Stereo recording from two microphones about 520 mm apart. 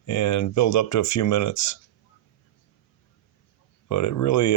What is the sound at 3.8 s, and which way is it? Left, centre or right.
Speech, left.